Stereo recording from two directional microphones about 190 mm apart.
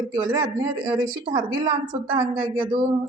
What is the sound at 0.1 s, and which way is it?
A woman's voice, 20° right (ahead or behind).